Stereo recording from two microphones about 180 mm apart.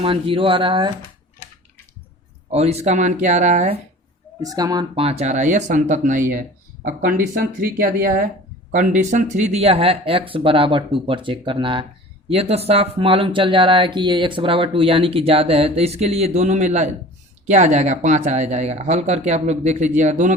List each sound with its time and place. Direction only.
0.0 s speech: 30° right (ahead or behind)
2.5 s speech: 35° right (ahead or behind)
4.4 s speech: 20° right (ahead or behind); by 20.3 s 45° right (ahead or behind)